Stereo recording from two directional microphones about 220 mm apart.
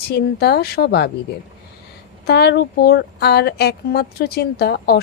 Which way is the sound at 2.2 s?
50° left (ahead or behind).